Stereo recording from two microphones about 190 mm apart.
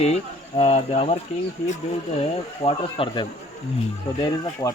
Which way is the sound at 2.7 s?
30° left (ahead or behind).